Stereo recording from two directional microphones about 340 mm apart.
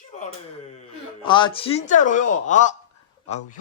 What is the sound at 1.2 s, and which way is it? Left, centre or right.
Speech, centre.